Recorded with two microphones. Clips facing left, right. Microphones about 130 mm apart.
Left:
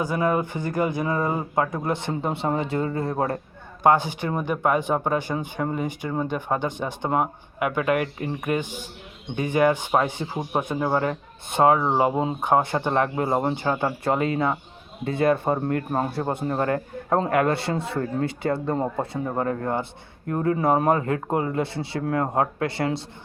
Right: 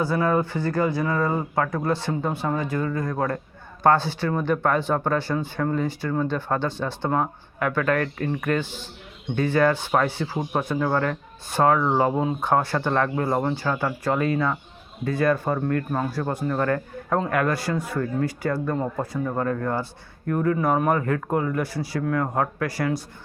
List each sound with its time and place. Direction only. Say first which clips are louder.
0.0 s speech: right 1 dB; 15° left (ahead or behind)
3.8 s speech: even; 15° left (ahead or behind)